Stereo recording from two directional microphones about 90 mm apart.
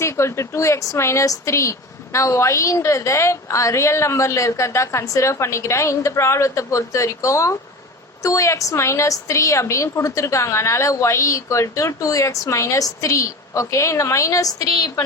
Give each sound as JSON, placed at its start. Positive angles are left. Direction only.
{"t": 0.0, "sound": "a woman's voice", "side_deg": 30}